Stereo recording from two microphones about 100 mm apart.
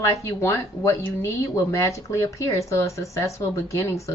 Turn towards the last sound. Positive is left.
turn(degrees=30)  # may be behind; listen again after turning